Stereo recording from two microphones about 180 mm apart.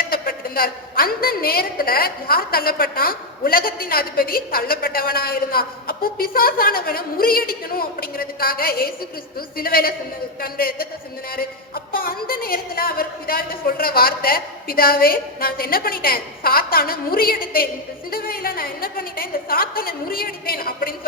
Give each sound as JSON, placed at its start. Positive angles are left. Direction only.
{"t": 0.0, "sound": "a woman's voice", "side_deg": 55}